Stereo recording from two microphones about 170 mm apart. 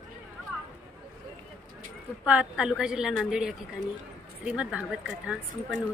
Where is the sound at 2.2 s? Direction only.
5° right (ahead or behind).